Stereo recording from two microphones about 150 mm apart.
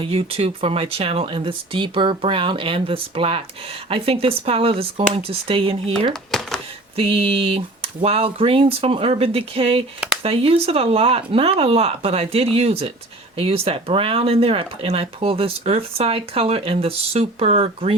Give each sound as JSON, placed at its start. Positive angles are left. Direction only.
{"t": 0.0, "sound": "speech", "side_deg": -40}